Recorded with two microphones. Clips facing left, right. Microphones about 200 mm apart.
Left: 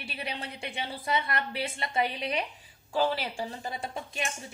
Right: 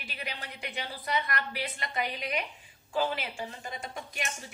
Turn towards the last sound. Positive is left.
turn(degrees=30)  # may be behind; listen again after turning